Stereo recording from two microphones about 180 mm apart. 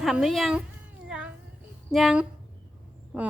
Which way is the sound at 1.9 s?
Centre (ahead or behind).